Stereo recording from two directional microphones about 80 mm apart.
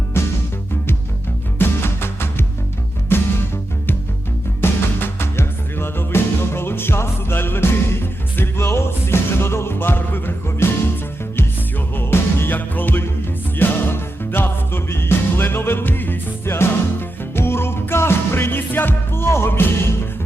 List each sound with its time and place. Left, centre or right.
0.1 s music: left
1.5 s music: left
4.6 s music: left
11.9 s music: left